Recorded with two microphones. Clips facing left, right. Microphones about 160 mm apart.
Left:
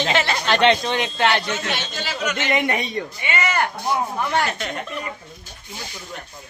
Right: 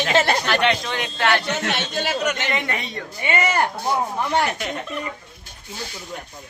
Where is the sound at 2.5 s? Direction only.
15° left (ahead or behind).